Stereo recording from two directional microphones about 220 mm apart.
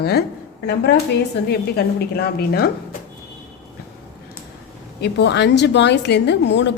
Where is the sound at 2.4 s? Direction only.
45° left (ahead or behind).